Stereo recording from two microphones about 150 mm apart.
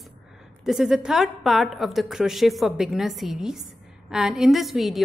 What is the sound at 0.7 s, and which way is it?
A woman's voice, 5° right (ahead or behind).